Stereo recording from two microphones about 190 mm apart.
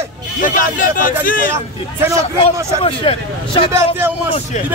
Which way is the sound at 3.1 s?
30° left (ahead or behind).